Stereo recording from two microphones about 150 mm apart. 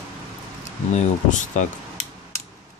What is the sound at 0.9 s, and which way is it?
Speech, 50° left (ahead or behind).